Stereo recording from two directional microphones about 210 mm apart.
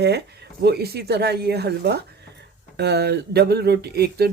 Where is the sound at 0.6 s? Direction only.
50° right (ahead or behind).